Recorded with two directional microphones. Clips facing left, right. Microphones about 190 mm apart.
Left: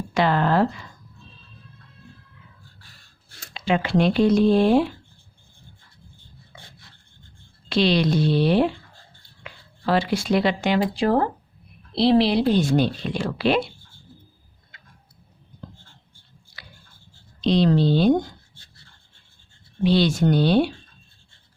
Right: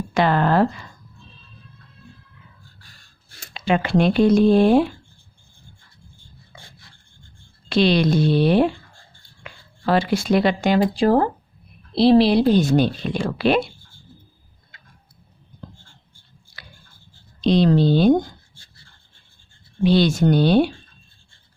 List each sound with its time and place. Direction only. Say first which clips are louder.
0.1 s speech: right 2 dB; 50° right (ahead or behind)
3.5 s speech: right 2 dB; 50° right (ahead or behind)
7.7 s speech: right 2 dB; 50° right (ahead or behind)
16.6 s a sound: right 1 dB; 50° right (ahead or behind)
17.4 s speech: right 2 dB; 50° right (ahead or behind)
19.8 s speech: right 2 dB; 50° right (ahead or behind)